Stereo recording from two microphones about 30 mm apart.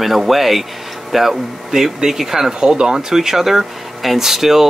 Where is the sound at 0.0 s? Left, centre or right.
Centre.